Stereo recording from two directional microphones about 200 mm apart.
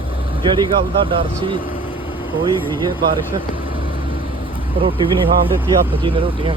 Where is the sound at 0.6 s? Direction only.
25° right (ahead or behind).